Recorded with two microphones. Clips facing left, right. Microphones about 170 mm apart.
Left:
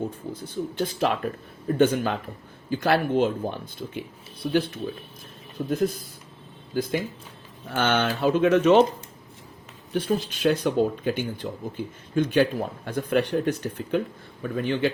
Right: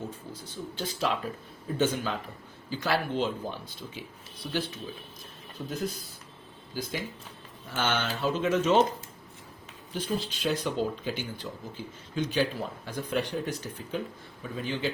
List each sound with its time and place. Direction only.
0.3 s speech: 55° left (ahead or behind)
5.6 s speech: 50° left (ahead or behind)
9.9 s speech: 60° left (ahead or behind)